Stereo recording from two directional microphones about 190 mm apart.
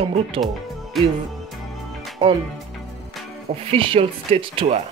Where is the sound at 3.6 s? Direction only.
30° right (ahead or behind).